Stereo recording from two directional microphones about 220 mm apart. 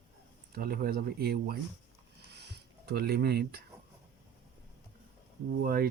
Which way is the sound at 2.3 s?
50° right (ahead or behind).